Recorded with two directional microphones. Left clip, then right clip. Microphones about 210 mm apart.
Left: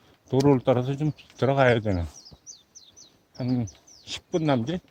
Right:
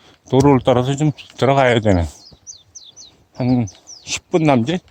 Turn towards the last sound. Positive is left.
turn(degrees=-35)  # may be behind; listen again after turning